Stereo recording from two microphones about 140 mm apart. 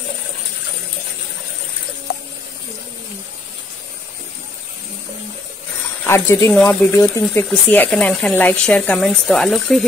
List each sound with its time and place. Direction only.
6.0 s speech: 20° left (ahead or behind); by 9.8 s centre (ahead or behind)